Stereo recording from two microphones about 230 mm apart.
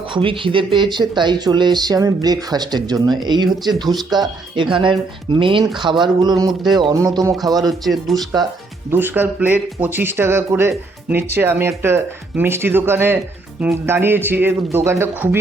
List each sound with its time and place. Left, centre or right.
0.1 s speech: right
6.5 s speech: centre
6.9 s speech: centre
7.6 s speech: centre